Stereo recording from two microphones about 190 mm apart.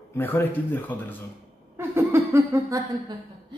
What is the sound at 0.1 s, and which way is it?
Speech, 10° left (ahead or behind).